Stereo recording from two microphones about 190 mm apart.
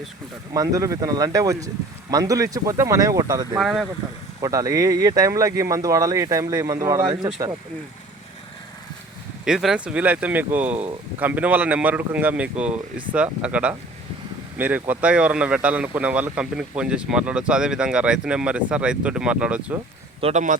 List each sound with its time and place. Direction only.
0.5 s speech: 15° right (ahead or behind)
3.6 s speech: centre (ahead or behind)
4.4 s speech: 20° right (ahead or behind)
9.4 s speech: 5° right (ahead or behind)
20.2 s speech: 40° right (ahead or behind)